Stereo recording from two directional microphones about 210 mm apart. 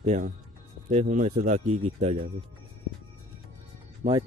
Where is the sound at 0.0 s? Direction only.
30° right (ahead or behind).